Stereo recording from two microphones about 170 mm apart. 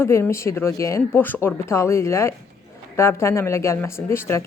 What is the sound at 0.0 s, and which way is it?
Speech, 15° left (ahead or behind).